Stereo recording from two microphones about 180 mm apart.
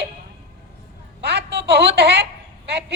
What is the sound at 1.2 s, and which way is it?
Speech, 65° right (ahead or behind).